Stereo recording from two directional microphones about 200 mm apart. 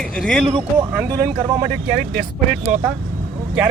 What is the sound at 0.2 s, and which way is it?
Speech, 5° left (ahead or behind).